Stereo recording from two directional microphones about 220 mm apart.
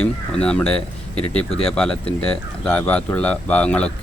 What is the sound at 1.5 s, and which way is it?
Speech, 25° left (ahead or behind).